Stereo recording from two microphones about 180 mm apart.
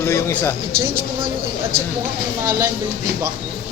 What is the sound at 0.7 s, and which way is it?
Speech, 60° right (ahead or behind).